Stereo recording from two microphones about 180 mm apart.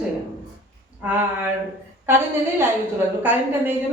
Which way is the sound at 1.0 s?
10° right (ahead or behind).